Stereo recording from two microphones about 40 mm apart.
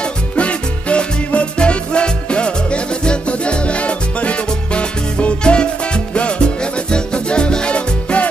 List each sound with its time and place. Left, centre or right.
0.4 s music: left